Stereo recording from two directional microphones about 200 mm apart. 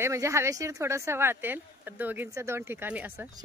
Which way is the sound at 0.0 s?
15° right (ahead or behind).